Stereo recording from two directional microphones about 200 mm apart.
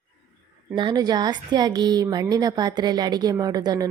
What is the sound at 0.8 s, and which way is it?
A woman's voice, 20° right (ahead or behind).